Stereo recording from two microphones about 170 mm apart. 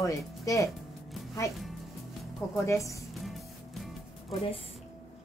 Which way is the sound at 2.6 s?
20° left (ahead or behind).